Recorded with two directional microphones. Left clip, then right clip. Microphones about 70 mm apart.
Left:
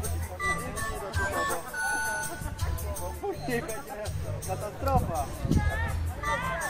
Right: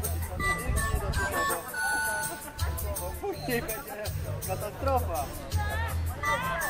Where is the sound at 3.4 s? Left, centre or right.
Right.